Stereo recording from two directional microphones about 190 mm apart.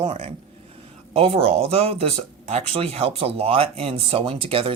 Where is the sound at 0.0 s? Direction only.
30° right (ahead or behind).